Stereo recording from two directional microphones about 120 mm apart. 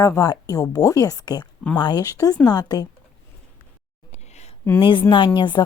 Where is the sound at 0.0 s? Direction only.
30° left (ahead or behind).